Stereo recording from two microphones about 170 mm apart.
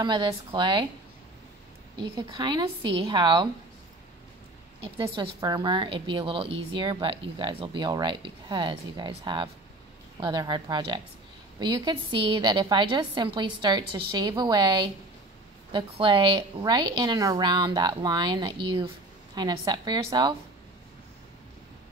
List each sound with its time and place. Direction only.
0.0 s speech: 25° right (ahead or behind)
2.0 s speech: 25° right (ahead or behind)
4.9 s a woman's voice: 30° right (ahead or behind)